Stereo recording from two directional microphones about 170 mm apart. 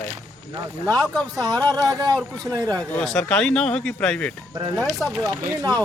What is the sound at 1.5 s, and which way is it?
Speech, 20° right (ahead or behind).